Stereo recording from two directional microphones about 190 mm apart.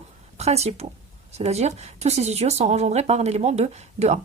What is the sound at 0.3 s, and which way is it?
A woman's voice, 35° right (ahead or behind).